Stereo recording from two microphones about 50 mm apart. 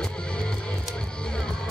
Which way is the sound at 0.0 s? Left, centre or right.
Centre.